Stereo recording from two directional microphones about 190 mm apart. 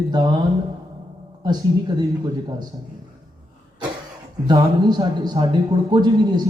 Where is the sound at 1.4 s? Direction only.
20° right (ahead or behind).